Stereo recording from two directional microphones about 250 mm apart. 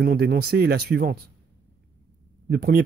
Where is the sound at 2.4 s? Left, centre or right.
Right.